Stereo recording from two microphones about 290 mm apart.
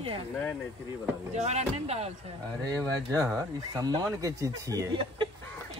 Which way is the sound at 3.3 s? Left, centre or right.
Centre.